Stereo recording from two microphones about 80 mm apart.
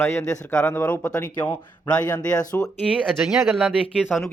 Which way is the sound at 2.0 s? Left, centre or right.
Left.